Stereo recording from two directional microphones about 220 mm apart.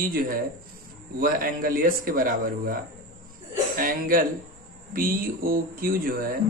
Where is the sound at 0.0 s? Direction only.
40° right (ahead or behind).